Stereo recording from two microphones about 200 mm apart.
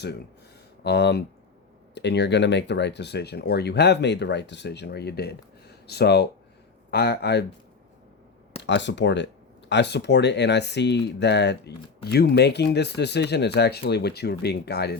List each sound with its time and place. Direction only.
0.9 s speech: 55° left (ahead or behind)
8.6 s speech: 60° left (ahead or behind)